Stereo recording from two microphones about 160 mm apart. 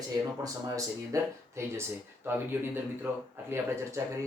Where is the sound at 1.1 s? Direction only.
20° right (ahead or behind).